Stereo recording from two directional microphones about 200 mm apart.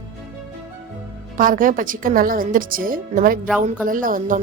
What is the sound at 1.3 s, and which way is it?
A woman's voice, 40° right (ahead or behind).